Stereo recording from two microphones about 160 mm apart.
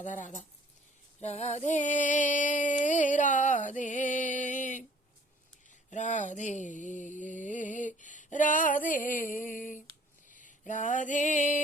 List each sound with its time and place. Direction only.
0.0 s music: 50° left (ahead or behind)
5.9 s mantra: 50° left (ahead or behind)
10.2 s a sound: 55° left (ahead or behind)
10.7 s music: 55° left (ahead or behind)